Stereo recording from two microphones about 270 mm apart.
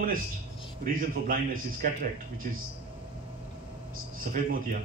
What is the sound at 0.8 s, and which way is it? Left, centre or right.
Speech, right.